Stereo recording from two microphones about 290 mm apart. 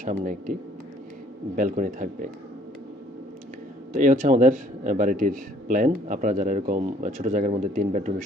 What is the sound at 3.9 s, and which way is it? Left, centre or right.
A man's voice, right.